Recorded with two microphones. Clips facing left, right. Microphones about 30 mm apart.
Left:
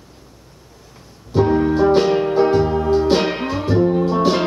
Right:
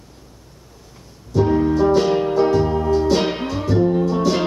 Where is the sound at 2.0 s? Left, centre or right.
Centre.